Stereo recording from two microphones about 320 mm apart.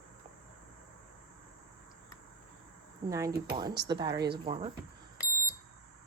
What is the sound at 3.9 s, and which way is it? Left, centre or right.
Speech, centre.